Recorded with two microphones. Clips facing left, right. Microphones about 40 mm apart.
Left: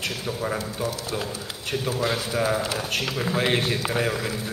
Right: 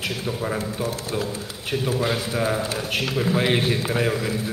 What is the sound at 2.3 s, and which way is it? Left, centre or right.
A man's voice, centre.